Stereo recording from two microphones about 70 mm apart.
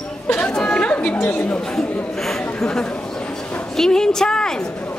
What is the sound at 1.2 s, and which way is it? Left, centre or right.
Speech, left.